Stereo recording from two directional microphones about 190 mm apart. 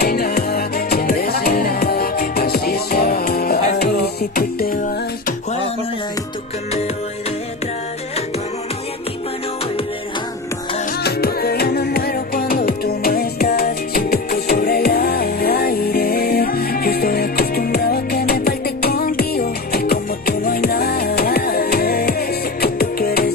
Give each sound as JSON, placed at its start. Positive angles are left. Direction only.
{"t": 0.0, "sound": "music", "side_deg": 55}
{"t": 11.0, "sound": "music", "side_deg": 55}